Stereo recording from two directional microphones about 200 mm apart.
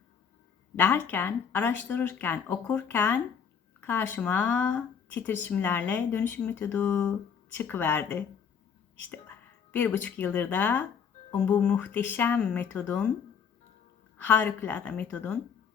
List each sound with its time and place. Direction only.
0.8 s speech: 10° left (ahead or behind)
14.2 s speech: 10° left (ahead or behind)